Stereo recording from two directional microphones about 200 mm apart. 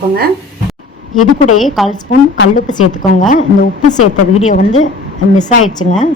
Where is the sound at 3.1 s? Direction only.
40° left (ahead or behind).